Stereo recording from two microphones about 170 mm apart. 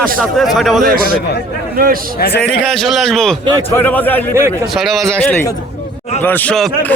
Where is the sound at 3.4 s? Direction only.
25° right (ahead or behind).